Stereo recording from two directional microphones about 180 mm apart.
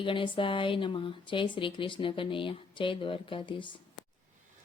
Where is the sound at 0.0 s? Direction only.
30° left (ahead or behind).